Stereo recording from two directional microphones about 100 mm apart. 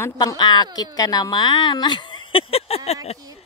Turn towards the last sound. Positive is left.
turn(degrees=90)